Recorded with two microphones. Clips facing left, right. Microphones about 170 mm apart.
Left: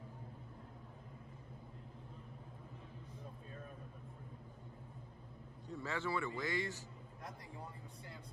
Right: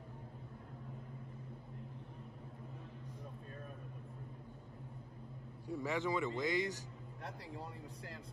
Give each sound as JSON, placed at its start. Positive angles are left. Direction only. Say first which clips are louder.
{"t": 5.7, "sound": "speech", "louder": "right 4 dB", "side_deg": -15}